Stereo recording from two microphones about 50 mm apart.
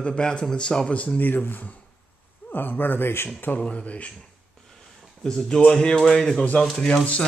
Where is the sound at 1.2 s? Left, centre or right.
Left.